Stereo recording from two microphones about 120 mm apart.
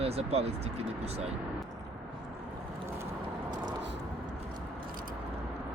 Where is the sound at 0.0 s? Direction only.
55° right (ahead or behind).